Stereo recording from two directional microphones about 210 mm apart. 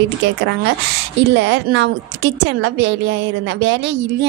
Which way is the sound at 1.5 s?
55° right (ahead or behind).